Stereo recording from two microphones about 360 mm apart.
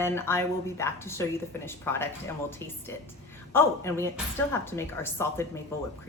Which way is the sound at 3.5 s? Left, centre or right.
Centre.